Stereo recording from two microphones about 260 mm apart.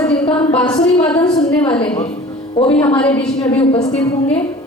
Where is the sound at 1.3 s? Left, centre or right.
Left.